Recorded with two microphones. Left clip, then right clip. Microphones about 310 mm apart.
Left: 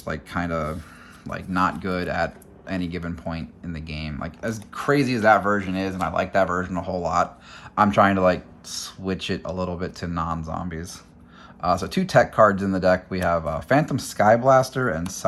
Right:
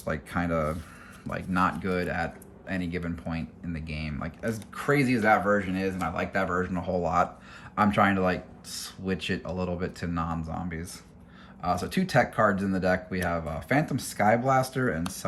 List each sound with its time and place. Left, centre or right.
0.0 s speech: centre